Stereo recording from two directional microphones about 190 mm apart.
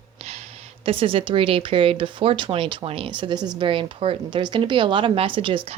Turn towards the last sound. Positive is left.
turn(degrees=-25)  # may be behind; listen again after turning